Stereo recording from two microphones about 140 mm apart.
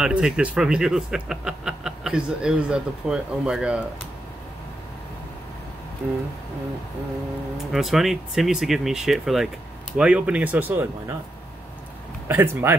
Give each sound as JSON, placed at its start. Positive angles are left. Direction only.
{"t": 0.0, "sound": "speech", "side_deg": -5}
{"t": 7.5, "sound": "speech", "side_deg": 0}
{"t": 12.3, "sound": "speech", "side_deg": -15}